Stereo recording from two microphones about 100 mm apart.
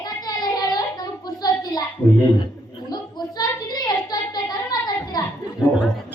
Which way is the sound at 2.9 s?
45° left (ahead or behind).